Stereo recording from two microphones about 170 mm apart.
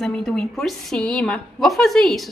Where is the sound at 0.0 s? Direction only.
5° left (ahead or behind).